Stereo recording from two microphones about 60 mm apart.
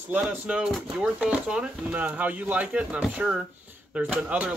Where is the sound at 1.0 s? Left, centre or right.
Centre.